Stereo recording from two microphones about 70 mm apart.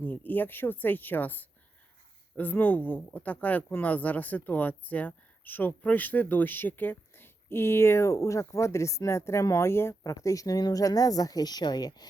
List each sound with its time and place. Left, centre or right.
0.0 s speech: left